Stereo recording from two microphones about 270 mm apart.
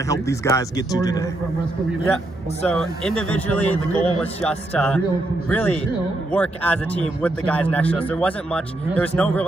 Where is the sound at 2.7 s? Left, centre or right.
Centre.